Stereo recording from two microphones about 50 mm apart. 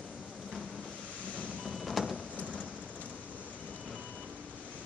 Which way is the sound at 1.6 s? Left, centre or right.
Centre.